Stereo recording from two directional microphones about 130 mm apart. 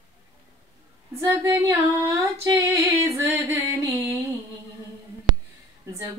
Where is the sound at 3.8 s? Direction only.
20° right (ahead or behind).